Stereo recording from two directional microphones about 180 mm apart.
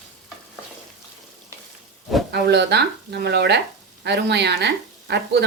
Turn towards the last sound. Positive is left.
turn(degrees=-65)  # may be behind; listen again after turning